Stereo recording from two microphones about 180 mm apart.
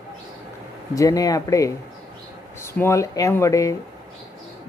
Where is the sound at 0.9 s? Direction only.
20° left (ahead or behind).